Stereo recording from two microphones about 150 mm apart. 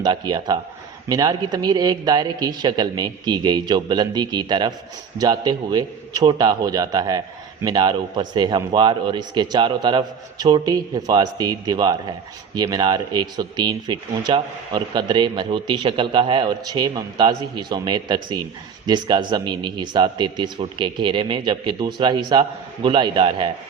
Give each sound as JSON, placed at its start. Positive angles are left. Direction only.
{"t": 0.0, "sound": "speech", "side_deg": -30}